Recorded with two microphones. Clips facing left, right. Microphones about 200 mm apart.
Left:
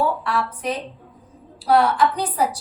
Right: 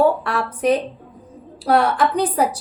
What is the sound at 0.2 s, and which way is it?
A woman's voice, 60° right (ahead or behind).